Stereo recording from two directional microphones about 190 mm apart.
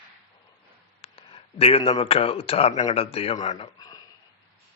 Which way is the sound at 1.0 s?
30° left (ahead or behind).